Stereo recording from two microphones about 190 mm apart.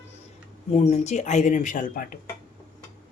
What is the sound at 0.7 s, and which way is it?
Speech, 35° left (ahead or behind).